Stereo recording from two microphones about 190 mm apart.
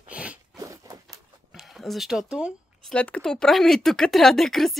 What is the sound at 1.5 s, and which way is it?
Speech, centre (ahead or behind).